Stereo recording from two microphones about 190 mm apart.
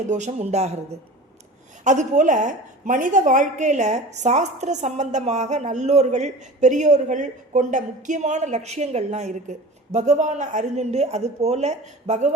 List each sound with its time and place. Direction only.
0.0 s a woman's voice: 40° right (ahead or behind)
1.8 s a woman's voice: 40° right (ahead or behind)